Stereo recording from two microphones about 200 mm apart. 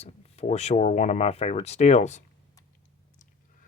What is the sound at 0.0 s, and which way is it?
Speech, 30° left (ahead or behind).